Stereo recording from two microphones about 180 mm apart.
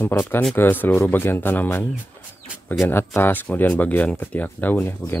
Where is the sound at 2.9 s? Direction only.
10° left (ahead or behind).